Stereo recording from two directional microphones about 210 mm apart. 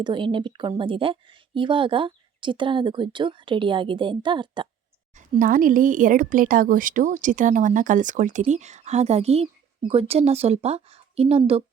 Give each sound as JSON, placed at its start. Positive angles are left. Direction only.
{"t": 0.0, "sound": "speech", "side_deg": -25}
{"t": 5.1, "sound": "a woman's voice", "side_deg": -40}